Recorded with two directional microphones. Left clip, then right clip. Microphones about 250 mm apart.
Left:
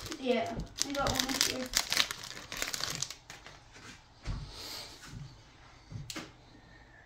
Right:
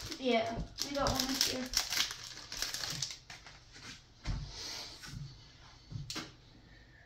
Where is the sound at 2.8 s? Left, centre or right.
Left.